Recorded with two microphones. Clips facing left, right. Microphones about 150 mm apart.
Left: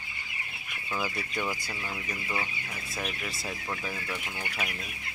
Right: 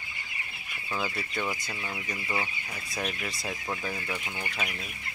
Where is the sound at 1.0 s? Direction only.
10° left (ahead or behind).